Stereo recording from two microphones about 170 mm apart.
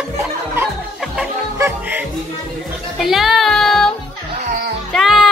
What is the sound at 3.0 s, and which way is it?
Child singing, centre (ahead or behind).